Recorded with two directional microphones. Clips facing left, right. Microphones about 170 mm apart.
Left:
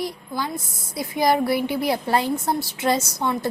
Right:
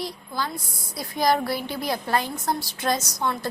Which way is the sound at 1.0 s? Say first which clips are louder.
Left 3 dB; 25° left (ahead or behind).